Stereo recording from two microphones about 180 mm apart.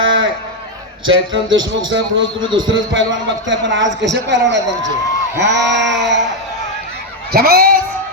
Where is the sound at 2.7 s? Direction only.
90° right.